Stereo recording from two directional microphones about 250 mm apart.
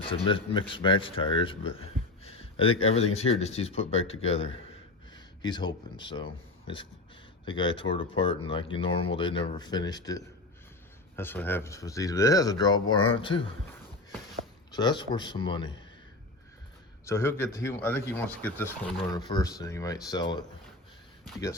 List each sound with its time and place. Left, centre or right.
0.0 s speech: left
2.2 s a sound: left
2.9 s speech: left
14.7 s speech: centre
17.1 s speech: centre
18.9 s speech: centre